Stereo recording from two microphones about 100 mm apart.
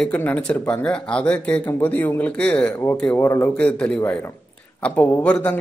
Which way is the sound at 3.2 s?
25° left (ahead or behind).